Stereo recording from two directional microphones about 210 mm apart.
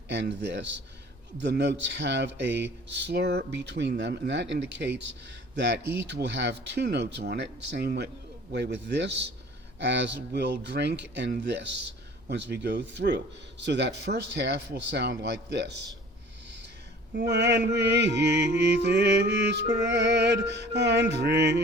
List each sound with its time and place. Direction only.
0.1 s speech: 55° right (ahead or behind)
17.2 s speech: 55° right (ahead or behind)